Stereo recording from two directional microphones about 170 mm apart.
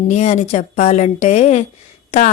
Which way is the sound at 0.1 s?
40° left (ahead or behind).